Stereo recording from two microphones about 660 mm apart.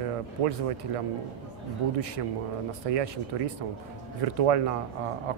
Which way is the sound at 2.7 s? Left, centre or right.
Right.